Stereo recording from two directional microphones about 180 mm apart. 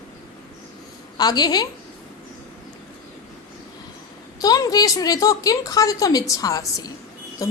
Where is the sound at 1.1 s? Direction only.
20° left (ahead or behind).